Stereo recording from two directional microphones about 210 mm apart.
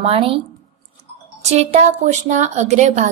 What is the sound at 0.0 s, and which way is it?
Speech, 25° right (ahead or behind).